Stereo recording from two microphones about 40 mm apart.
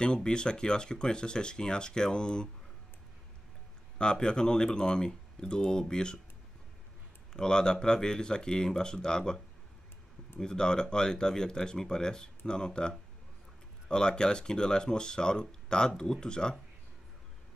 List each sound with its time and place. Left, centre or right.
0.0 s speech: left
4.0 s speech: left
7.3 s speech: centre
10.4 s speech: centre